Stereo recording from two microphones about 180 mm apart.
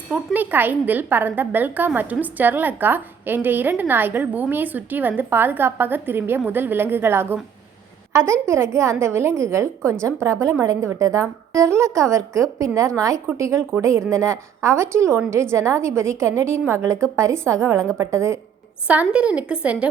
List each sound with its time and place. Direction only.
0.1 s a woman's voice: 10° right (ahead or behind)